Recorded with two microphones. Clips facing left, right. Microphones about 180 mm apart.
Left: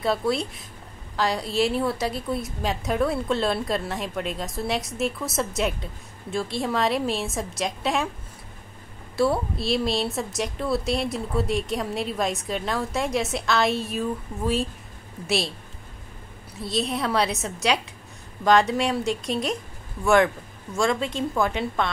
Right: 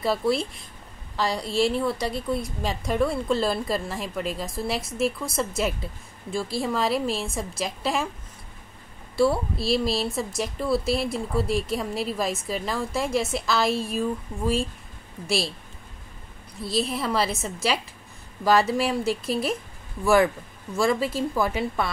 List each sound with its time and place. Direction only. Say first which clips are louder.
0.0 s a woman's voice: even; centre (ahead or behind)
9.1 s a woman's voice: right 1 dB; centre (ahead or behind)
16.5 s a woman's voice: even; centre (ahead or behind)
20.7 s a woman's voice: right 1 dB; 5° right (ahead or behind)